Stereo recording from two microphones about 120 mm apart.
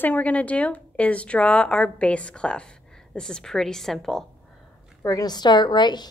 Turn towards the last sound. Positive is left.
turn(degrees=35)  # may be behind; listen again after turning